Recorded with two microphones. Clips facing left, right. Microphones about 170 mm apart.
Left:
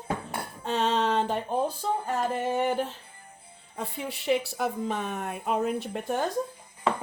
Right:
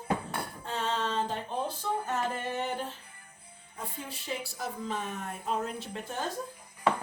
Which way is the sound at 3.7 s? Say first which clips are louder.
Left 6 dB; 75° left (ahead or behind).